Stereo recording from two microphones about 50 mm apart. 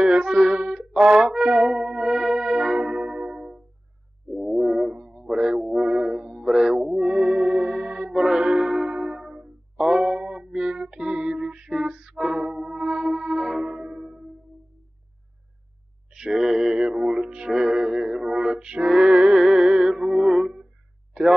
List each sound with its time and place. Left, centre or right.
0.0 s music: centre
16.1 s music: centre
21.1 s a sound: centre